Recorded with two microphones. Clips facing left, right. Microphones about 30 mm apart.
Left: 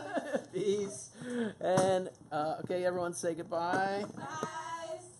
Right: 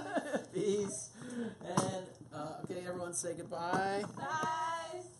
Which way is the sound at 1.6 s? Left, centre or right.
Left.